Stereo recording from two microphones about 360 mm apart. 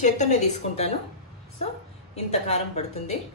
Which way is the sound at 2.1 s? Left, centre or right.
Centre.